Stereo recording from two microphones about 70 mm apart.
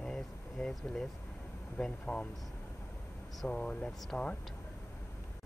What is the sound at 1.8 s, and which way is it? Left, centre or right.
Speech, centre.